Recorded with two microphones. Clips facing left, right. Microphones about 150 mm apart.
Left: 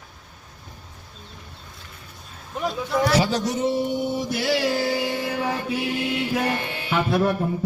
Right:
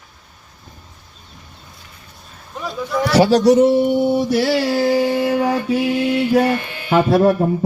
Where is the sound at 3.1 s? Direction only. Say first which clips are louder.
Right 10 dB; 70° right (ahead or behind).